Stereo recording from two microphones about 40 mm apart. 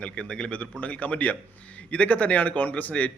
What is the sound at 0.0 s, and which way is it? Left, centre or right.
Speech, left.